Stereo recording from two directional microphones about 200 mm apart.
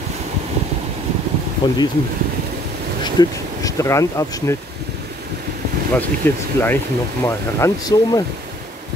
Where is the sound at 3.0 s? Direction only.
20° left (ahead or behind).